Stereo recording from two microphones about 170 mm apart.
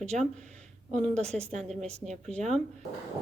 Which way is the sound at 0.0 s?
45° right (ahead or behind).